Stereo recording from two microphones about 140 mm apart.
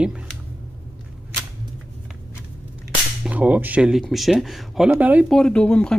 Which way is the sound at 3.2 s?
10° right (ahead or behind).